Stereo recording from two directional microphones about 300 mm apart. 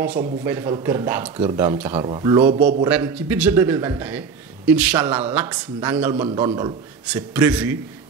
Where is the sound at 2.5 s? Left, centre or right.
Right.